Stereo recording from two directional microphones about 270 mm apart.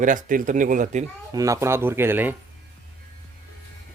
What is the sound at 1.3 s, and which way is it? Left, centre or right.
Speech, centre.